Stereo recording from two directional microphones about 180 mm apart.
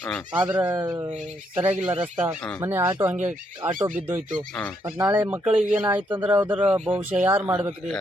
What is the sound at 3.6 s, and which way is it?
Speech, 25° right (ahead or behind).